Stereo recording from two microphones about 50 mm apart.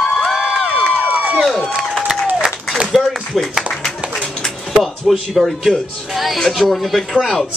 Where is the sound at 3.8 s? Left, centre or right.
Centre.